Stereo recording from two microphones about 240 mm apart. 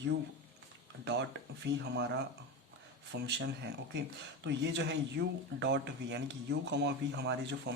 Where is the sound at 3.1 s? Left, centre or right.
Right.